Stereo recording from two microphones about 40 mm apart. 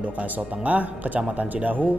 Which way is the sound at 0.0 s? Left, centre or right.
Right.